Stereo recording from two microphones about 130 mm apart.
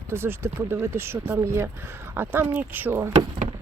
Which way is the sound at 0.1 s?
20° right (ahead or behind).